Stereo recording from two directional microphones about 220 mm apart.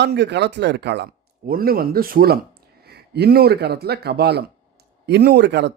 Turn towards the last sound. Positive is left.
turn(degrees=-50)  # may be behind; listen again after turning